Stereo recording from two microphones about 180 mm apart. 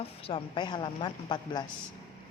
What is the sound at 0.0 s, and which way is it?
Speech, 30° left (ahead or behind).